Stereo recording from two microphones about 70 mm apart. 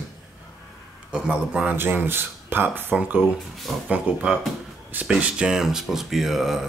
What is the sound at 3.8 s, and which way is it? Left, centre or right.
Speech, centre.